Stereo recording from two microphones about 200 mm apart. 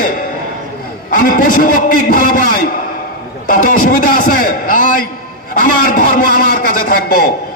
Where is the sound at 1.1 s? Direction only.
45° left (ahead or behind).